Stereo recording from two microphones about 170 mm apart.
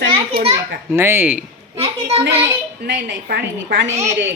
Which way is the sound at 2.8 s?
90° right.